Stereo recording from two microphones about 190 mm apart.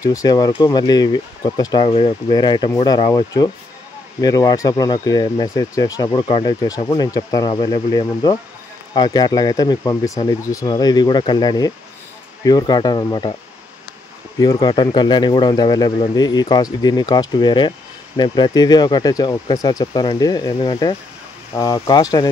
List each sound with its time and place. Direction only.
0.0 s speech: 20° left (ahead or behind)
14.4 s speech: 20° left (ahead or behind)